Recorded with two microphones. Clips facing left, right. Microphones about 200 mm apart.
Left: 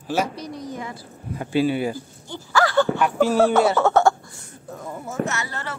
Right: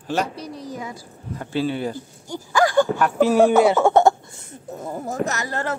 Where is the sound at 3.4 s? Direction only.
15° right (ahead or behind).